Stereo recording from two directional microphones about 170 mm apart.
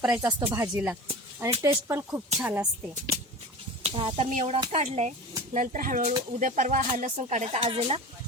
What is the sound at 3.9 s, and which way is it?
Speech, 30° right (ahead or behind).